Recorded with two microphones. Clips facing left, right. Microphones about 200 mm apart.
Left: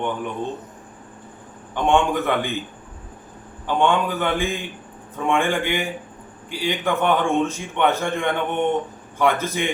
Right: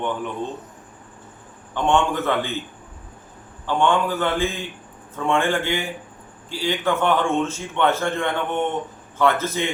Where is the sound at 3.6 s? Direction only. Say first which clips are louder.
Even; 15° left (ahead or behind).